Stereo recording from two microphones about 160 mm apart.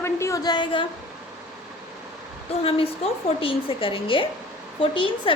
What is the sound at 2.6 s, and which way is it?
A woman's voice, 35° left (ahead or behind).